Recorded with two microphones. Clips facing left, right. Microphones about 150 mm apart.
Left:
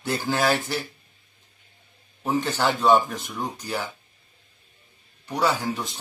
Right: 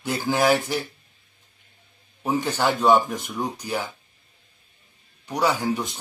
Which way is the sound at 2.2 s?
10° right (ahead or behind).